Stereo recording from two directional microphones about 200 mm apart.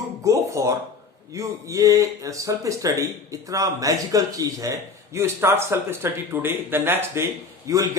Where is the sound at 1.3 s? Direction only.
15° right (ahead or behind).